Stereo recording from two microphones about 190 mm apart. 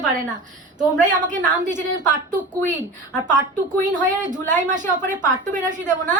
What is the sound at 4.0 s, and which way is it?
A woman's voice, 40° right (ahead or behind).